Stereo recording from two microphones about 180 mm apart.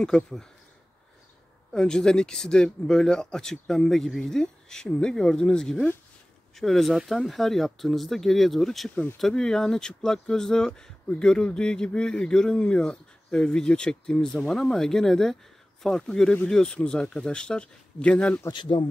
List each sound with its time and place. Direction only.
0.0 s speech: 5° left (ahead or behind)
1.7 s speech: 5° left (ahead or behind)
18.5 s speech: 25° left (ahead or behind)